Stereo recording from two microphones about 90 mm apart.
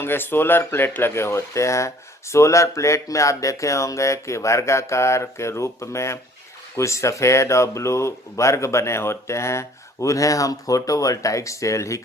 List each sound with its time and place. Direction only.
0.0 s speech: 25° left (ahead or behind)